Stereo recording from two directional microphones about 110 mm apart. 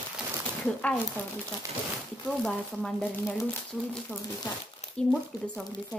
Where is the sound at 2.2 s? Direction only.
5° left (ahead or behind).